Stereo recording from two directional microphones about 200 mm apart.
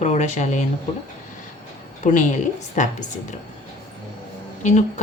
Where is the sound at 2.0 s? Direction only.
40° left (ahead or behind).